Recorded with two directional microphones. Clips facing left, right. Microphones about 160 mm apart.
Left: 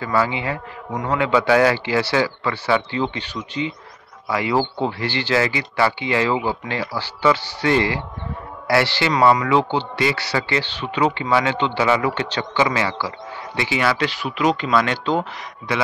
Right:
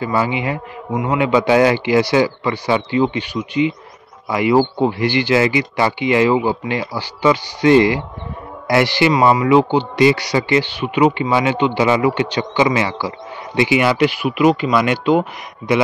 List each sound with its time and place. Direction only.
0.0 s speech: 15° right (ahead or behind)